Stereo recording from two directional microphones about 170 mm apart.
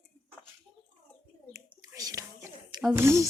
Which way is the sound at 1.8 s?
20° right (ahead or behind).